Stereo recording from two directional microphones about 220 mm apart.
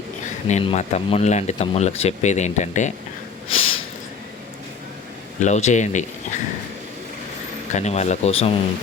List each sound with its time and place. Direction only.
0.4 s speech: 30° left (ahead or behind)
3.5 s snort: 25° left (ahead or behind)
5.4 s speech: 30° left (ahead or behind)
7.7 s speech: 30° left (ahead or behind)